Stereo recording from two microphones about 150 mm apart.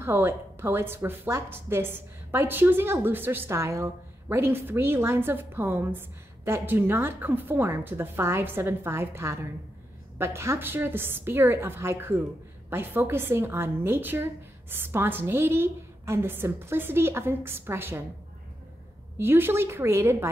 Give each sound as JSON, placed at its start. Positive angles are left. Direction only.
{"t": 0.0, "sound": "speech", "side_deg": -15}
{"t": 19.1, "sound": "speech", "side_deg": -15}